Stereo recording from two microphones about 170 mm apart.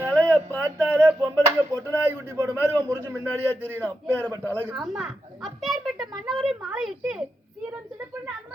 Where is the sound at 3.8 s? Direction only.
10° left (ahead or behind).